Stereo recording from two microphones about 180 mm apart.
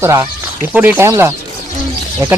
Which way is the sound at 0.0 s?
15° right (ahead or behind).